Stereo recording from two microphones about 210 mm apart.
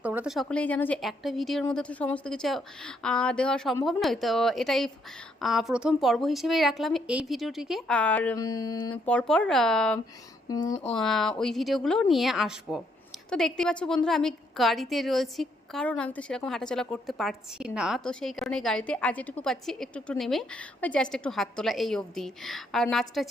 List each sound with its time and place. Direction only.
0.0 s a woman's voice: 5° right (ahead or behind); by 8.8 s 15° left (ahead or behind)
8.9 s a woman's voice: 5° left (ahead or behind)
10.5 s speech: 15° left (ahead or behind)
10.8 s a woman's voice: centre (ahead or behind)